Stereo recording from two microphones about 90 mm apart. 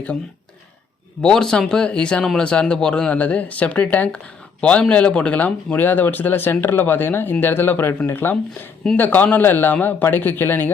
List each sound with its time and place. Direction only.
1.2 s a man's voice: 5° left (ahead or behind); by 10.7 s 25° left (ahead or behind)